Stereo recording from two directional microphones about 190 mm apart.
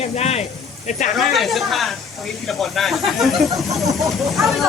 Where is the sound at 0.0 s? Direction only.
35° left (ahead or behind).